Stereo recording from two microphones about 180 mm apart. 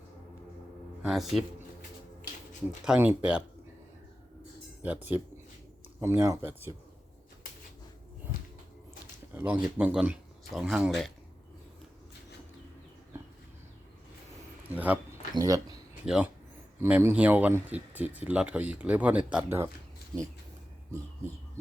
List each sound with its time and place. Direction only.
1.0 s speech: centre (ahead or behind)
2.8 s speech: 5° right (ahead or behind)
4.8 s speech: 10° right (ahead or behind)
9.3 s a sound: 10° right (ahead or behind)
9.6 s speech: 5° right (ahead or behind)
14.7 s a sound: 10° right (ahead or behind)
15.4 s speech: 20° right (ahead or behind)
16.0 s speech: 5° right (ahead or behind)